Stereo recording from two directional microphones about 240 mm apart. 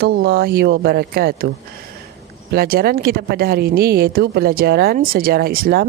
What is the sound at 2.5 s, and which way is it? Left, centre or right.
Speech, right.